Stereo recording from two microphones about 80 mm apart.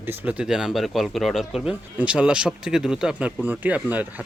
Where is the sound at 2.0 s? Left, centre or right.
Centre.